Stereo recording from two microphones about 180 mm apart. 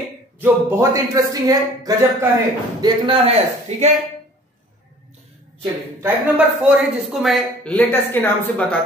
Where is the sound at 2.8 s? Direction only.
30° right (ahead or behind).